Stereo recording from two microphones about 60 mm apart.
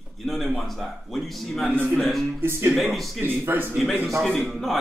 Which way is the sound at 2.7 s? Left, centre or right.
Centre.